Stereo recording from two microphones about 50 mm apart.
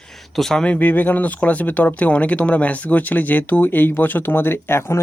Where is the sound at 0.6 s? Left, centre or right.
Left.